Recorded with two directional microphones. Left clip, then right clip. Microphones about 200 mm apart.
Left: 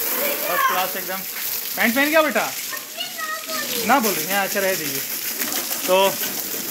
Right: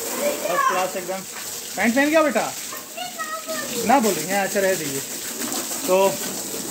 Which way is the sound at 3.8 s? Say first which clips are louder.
Right 1 dB; centre (ahead or behind).